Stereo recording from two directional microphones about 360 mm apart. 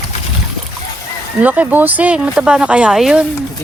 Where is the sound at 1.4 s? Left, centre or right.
Centre.